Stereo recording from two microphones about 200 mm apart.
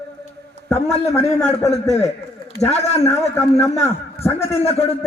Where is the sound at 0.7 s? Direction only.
30° left (ahead or behind).